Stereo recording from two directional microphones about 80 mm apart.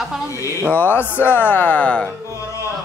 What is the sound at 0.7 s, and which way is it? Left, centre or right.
Speech, left.